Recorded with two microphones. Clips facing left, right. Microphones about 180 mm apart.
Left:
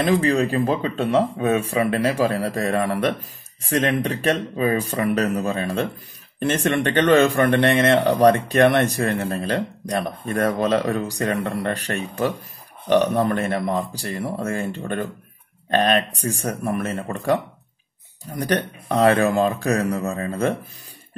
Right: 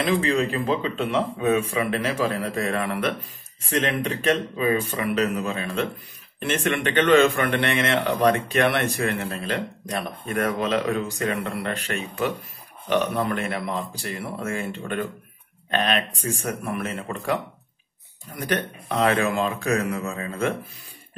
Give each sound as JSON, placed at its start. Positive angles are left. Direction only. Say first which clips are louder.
{"t": 0.0, "sound": "a man's voice", "louder": "left 3 dB", "side_deg": 40}
{"t": 4.1, "sound": "a man's voice", "louder": "left 1 dB", "side_deg": 40}
{"t": 18.9, "sound": "a man's voice", "louder": "left 5 dB", "side_deg": 40}